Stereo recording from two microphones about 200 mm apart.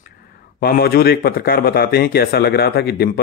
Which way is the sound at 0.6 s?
50° left (ahead or behind).